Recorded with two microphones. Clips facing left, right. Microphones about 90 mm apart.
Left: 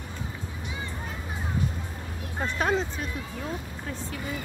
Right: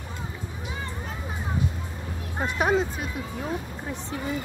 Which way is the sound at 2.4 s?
10° right (ahead or behind).